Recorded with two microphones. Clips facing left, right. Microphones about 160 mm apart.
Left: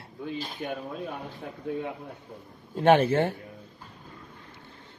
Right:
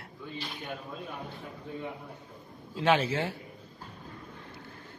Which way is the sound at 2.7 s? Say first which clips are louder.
Left 6 dB; 55° left (ahead or behind).